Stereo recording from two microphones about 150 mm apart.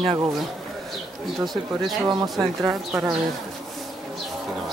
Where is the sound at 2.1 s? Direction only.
25° right (ahead or behind).